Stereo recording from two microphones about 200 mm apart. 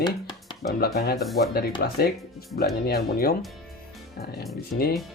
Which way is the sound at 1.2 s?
Centre (ahead or behind).